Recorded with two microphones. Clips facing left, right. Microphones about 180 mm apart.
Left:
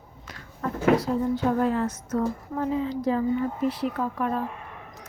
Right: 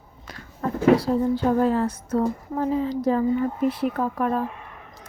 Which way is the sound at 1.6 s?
30° right (ahead or behind).